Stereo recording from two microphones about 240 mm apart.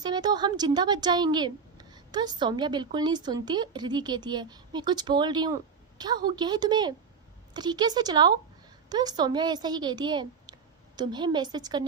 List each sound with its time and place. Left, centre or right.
0.0 s a woman's voice: centre